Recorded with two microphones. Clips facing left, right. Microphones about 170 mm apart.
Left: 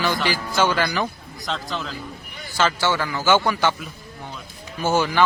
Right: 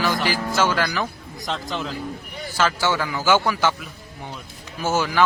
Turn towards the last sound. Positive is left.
turn(degrees=0)  # may be behind; listen again after turning